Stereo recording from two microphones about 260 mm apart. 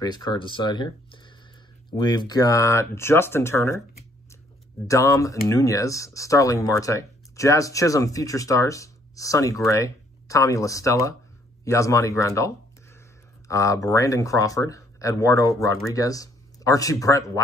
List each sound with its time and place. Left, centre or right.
0.0 s speech: centre
4.8 s speech: centre